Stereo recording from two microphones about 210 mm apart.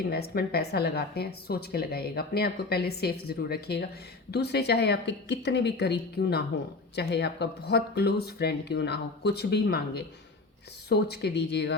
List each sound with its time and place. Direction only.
0.1 s a woman's voice: 50° left (ahead or behind)